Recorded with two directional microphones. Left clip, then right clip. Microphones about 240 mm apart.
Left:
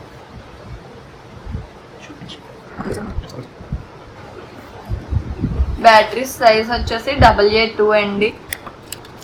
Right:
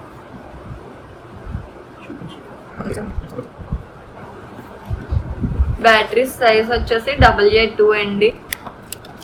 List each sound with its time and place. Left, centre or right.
5.8 s a woman's voice: centre